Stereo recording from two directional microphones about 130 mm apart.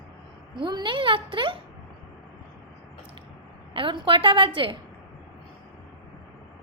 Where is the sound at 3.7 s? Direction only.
40° right (ahead or behind).